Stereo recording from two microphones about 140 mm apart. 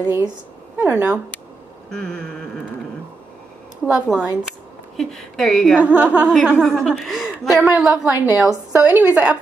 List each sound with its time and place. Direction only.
0.7 s a woman's voice: 10° right (ahead or behind)
1.9 s speech: 5° left (ahead or behind)
3.8 s a woman's voice: 5° right (ahead or behind)
5.8 s a woman's voice: 10° right (ahead or behind)
6.5 s a woman's voice: centre (ahead or behind)